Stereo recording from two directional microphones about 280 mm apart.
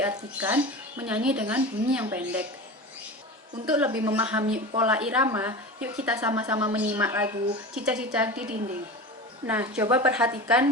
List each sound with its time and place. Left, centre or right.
0.0 s speech: centre
3.7 s speech: centre
4.4 s speech: right
4.8 s a woman's voice: centre